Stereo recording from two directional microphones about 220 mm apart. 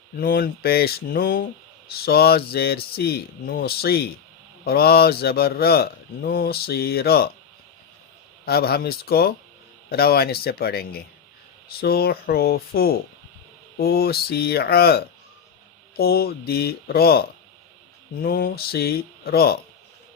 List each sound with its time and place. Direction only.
0.2 s speech: 45° left (ahead or behind)
8.4 s speech: 45° left (ahead or behind)